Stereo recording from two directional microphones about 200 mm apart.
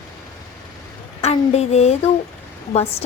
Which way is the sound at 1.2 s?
30° left (ahead or behind).